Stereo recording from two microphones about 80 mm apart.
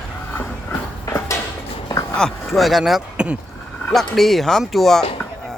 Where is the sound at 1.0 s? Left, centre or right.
Left.